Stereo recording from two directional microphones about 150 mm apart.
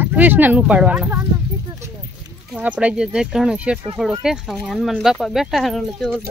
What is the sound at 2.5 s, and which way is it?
Speech, 10° right (ahead or behind).